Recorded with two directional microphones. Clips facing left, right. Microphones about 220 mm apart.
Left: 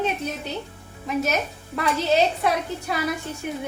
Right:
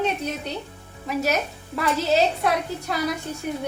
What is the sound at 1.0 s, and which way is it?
Speech, centre (ahead or behind).